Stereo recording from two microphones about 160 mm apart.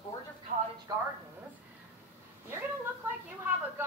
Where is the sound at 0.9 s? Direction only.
25° right (ahead or behind).